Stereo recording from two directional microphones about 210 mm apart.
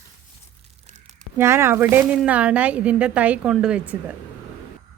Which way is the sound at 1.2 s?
10° right (ahead or behind).